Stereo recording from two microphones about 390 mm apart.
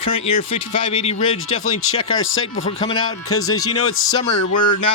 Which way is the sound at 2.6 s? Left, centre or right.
Centre.